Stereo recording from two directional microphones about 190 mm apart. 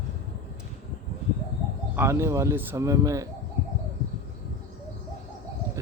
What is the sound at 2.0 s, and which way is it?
Speech, 15° right (ahead or behind).